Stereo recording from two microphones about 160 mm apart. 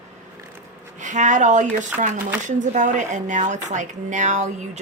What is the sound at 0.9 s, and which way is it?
Speech, 50° right (ahead or behind).